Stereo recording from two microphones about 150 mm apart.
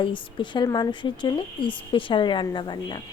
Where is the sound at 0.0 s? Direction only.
35° left (ahead or behind).